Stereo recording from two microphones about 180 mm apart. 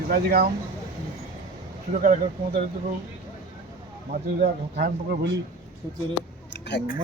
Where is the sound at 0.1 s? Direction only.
55° right (ahead or behind).